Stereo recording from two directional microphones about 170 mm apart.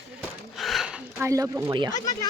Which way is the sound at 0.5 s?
Centre (ahead or behind).